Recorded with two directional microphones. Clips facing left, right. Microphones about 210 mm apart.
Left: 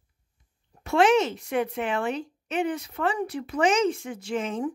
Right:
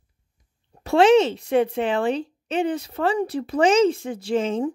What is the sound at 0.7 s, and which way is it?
Speech, 30° right (ahead or behind).